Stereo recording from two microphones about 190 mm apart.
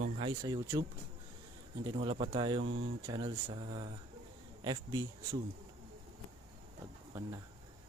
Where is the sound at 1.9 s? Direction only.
25° right (ahead or behind).